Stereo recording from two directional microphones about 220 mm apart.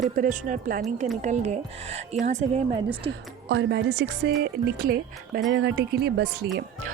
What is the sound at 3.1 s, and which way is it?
Speech, 50° right (ahead or behind).